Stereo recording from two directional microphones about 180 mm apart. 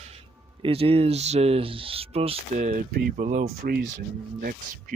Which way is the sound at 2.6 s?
50° right (ahead or behind).